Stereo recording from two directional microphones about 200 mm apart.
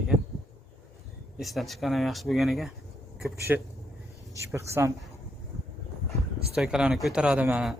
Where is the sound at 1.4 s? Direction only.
Centre (ahead or behind).